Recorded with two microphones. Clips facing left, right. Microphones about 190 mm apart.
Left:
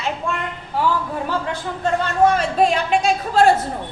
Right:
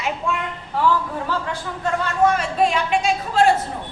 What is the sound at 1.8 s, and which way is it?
A woman's voice, 30° left (ahead or behind).